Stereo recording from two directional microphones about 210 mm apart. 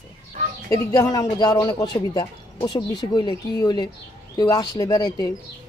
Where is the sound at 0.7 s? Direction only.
15° left (ahead or behind).